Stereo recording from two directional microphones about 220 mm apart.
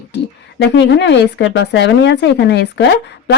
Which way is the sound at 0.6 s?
55° left (ahead or behind).